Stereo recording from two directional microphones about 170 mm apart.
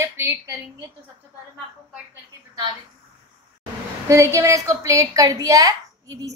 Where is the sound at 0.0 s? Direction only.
15° right (ahead or behind).